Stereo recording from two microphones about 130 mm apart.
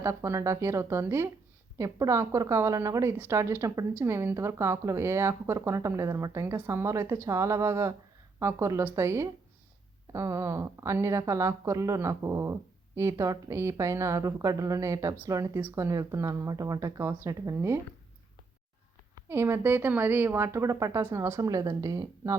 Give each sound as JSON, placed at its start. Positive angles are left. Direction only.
{"t": 0.0, "sound": "speech", "side_deg": -20}
{"t": 19.1, "sound": "speech", "side_deg": -20}